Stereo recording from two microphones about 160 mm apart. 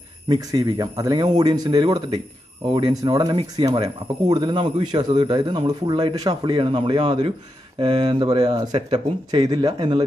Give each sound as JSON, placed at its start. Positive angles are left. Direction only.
{"t": 0.3, "sound": "speech", "side_deg": -25}